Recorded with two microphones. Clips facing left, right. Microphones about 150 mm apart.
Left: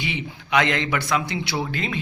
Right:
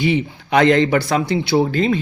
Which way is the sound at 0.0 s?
40° right (ahead or behind).